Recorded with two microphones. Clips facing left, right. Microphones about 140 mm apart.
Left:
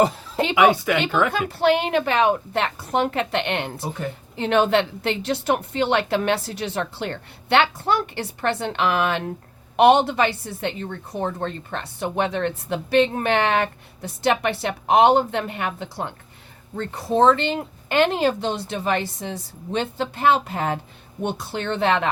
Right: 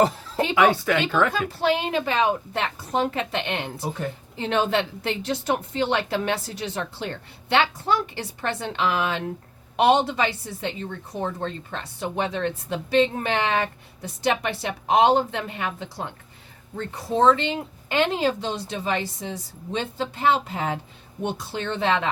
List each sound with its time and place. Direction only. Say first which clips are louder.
0.0 s a sound: left 1 dB; 15° left (ahead or behind)
0.5 s a woman's voice: left 2 dB; 15° left (ahead or behind)
1.3 s a woman's voice: left 4 dB; 65° left (ahead or behind)
3.8 s a woman's voice: even; centre (ahead or behind)
4.4 s a woman's voice: left 4 dB; 65° left (ahead or behind)